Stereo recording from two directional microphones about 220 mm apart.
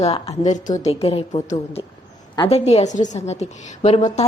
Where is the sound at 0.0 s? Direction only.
30° left (ahead or behind).